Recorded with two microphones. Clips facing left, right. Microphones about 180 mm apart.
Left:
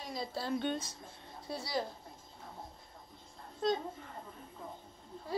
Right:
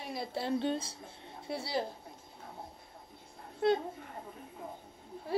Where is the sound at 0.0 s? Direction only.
60° right (ahead or behind).